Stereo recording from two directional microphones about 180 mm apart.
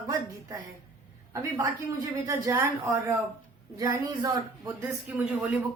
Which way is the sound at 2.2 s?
15° right (ahead or behind).